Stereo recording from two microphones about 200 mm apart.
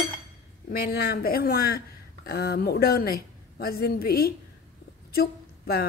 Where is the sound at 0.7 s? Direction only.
50° left (ahead or behind).